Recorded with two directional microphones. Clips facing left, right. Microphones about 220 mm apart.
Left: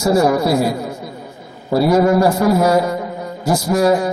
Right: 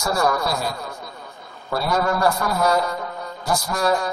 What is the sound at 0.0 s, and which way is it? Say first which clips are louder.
Speech: left 8 dB; 20° left (ahead or behind).